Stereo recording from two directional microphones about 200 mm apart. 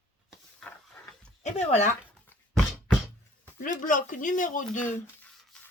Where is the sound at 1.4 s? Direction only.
35° left (ahead or behind).